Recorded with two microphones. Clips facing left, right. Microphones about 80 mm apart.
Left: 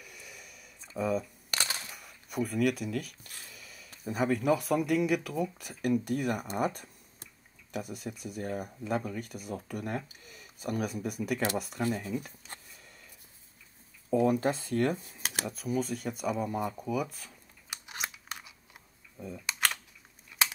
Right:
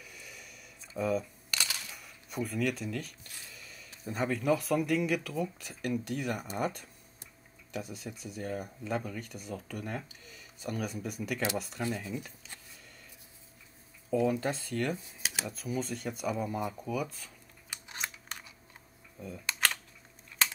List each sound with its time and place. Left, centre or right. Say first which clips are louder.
0.0 s a sound: even; centre
1.5 s crushing: left 2 dB; left
2.0 s speech: left 4 dB; centre
14.1 s speech: left 3 dB; left
15.4 s speech: left 4 dB; centre
17.6 s scissors: left 2 dB; centre
19.1 s camera: left 1 dB; centre